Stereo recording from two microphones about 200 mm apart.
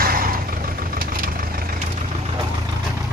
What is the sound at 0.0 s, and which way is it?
Vehicle, 45° right (ahead or behind).